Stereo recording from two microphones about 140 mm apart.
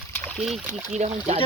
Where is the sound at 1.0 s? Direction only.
55° right (ahead or behind).